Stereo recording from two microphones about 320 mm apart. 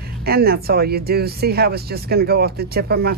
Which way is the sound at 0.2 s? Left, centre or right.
Right.